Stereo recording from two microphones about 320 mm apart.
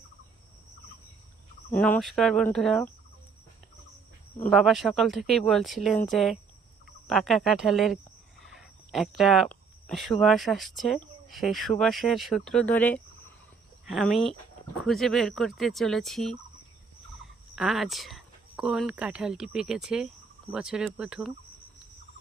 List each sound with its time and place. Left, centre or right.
1.7 s speech: centre
4.4 s speech: centre
17.5 s speech: centre